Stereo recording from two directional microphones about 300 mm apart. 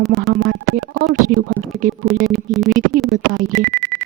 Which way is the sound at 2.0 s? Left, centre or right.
Centre.